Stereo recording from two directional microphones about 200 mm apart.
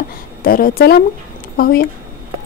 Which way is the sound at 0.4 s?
45° left (ahead or behind).